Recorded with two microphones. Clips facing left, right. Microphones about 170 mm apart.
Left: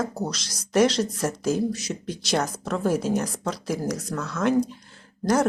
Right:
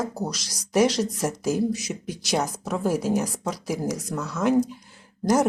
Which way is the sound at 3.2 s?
15° right (ahead or behind).